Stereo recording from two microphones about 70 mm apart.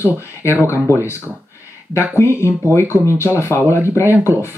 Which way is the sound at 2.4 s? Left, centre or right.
Left.